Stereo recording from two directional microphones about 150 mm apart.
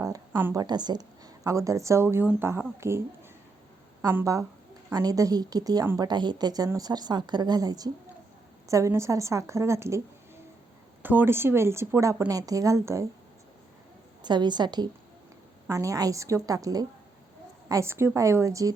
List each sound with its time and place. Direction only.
0.0 s a sound: 20° right (ahead or behind)
0.6 s a woman's voice: 30° right (ahead or behind)
4.0 s a woman's voice: 20° right (ahead or behind)
11.0 s a woman's voice: 10° right (ahead or behind)
14.2 s a woman's voice: 30° right (ahead or behind)